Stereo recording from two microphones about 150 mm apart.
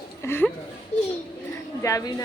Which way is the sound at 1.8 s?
20° left (ahead or behind).